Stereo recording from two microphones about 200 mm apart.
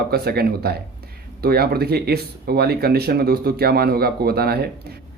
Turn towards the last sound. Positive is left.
turn(degrees=-50)  # may be behind; listen again after turning